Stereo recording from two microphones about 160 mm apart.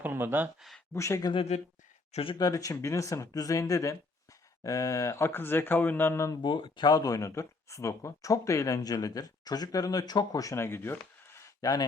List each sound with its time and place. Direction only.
0.0 s speech: 15° right (ahead or behind)
0.9 s speech: 20° left (ahead or behind)
1.3 s speech: 40° left (ahead or behind)
2.4 s a man's voice: 20° left (ahead or behind)
6.4 s speech: 30° left (ahead or behind)